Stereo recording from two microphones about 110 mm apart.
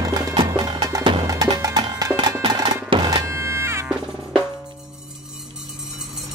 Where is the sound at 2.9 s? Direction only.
55° right (ahead or behind).